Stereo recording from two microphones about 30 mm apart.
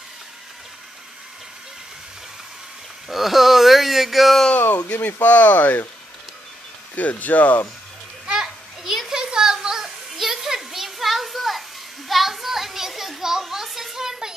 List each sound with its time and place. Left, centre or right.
3.1 s speech: centre
4.6 s speech: left
7.0 s speech: left
8.3 s children playing: centre
9.1 s a sound: right; by 13.9 s centre
13.9 s a sound: centre